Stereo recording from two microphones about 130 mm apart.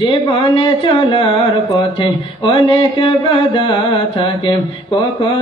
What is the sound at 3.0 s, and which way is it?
Mantra, 40° left (ahead or behind).